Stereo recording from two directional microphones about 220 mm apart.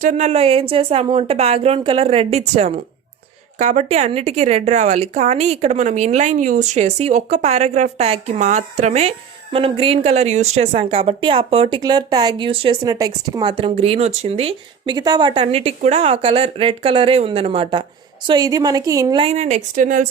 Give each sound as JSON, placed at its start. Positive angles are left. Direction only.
{"t": 0.0, "sound": "speech", "side_deg": -30}